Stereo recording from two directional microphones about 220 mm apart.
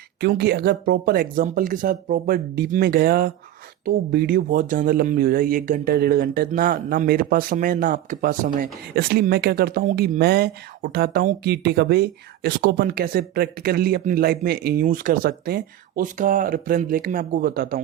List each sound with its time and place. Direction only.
0.2 s speech: 45° right (ahead or behind)